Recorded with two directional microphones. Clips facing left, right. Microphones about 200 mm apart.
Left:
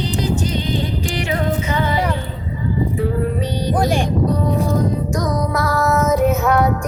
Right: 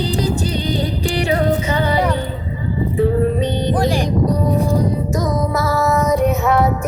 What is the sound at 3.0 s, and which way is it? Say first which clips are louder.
Music: right 4 dB; 20° right (ahead or behind).